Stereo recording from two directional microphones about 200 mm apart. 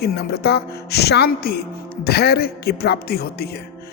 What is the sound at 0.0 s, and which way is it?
Speech, 50° left (ahead or behind).